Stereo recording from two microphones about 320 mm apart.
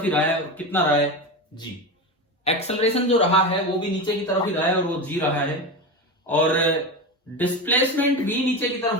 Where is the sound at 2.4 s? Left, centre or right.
Centre.